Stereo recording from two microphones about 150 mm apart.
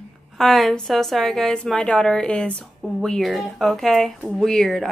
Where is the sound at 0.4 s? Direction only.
Centre (ahead or behind).